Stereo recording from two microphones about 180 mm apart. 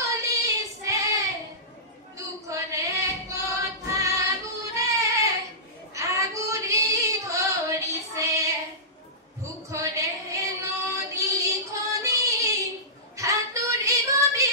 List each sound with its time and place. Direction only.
0.0 s child singing: 20° right (ahead or behind)
2.1 s female singing: 15° right (ahead or behind)
4.7 s child singing: 20° right (ahead or behind)
5.9 s female singing: 15° right (ahead or behind)
9.7 s child singing: 15° right (ahead or behind)